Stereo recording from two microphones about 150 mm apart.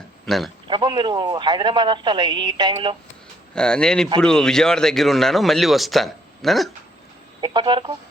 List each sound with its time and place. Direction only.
0.3 s speech: centre (ahead or behind)
0.7 s speech: 30° right (ahead or behind)
3.5 s speech: 5° left (ahead or behind)
7.4 s speech: 30° right (ahead or behind)